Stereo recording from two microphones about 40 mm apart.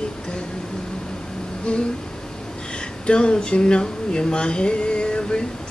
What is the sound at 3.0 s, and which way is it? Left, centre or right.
Speech, left.